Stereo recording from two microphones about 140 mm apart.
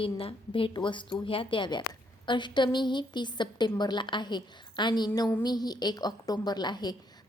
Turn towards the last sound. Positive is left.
turn(degrees=30)  # may be behind; listen again after turning